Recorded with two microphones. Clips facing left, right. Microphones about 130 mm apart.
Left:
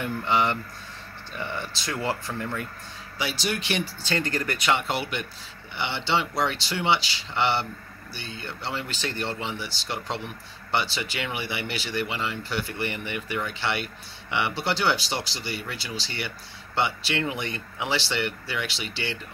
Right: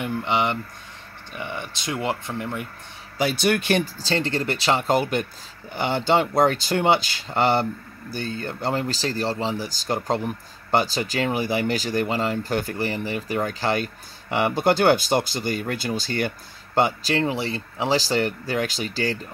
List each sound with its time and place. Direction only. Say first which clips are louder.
0.0 s speech: right 1 dB; 20° right (ahead or behind)
3.2 s speech: right 8 dB; 55° right (ahead or behind)
4.0 s speech: right 3 dB; 30° right (ahead or behind)